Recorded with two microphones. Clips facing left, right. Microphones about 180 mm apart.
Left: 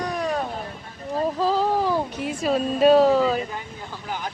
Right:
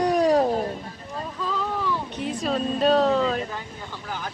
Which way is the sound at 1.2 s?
35° left (ahead or behind).